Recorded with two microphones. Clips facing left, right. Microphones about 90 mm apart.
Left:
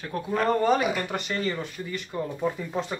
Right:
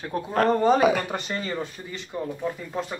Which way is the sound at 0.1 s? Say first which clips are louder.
Right 2 dB; 30° right (ahead or behind).